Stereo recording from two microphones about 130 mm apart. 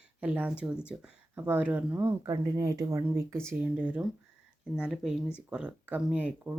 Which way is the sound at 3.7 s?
10° right (ahead or behind).